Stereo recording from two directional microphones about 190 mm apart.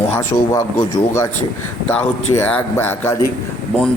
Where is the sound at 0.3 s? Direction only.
20° left (ahead or behind).